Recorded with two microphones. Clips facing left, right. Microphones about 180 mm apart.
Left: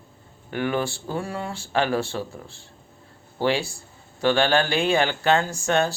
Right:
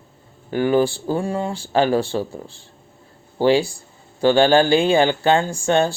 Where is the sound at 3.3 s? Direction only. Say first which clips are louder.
Right 7 dB; 30° right (ahead or behind).